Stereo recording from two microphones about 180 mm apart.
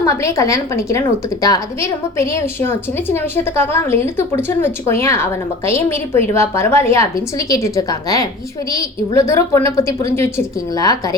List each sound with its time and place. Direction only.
0.0 s a woman's voice: 15° left (ahead or behind)